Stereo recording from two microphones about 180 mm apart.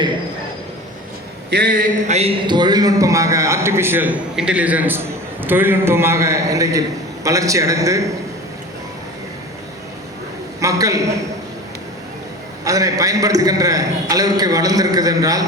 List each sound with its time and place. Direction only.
1.5 s a man's voice: 70° right (ahead or behind)
1.7 s a man's voice: 45° right (ahead or behind); by 8.1 s 15° right (ahead or behind)
10.6 s a man's voice: 20° right (ahead or behind)
12.6 s a man's voice: 20° right (ahead or behind)